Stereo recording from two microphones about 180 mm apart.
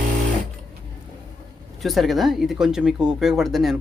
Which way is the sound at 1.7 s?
Centre (ahead or behind).